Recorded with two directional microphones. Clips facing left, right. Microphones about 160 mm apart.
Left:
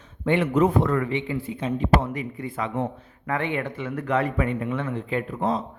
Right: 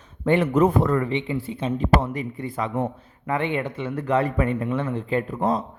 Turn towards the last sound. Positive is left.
turn(degrees=-45)  # may be behind; listen again after turning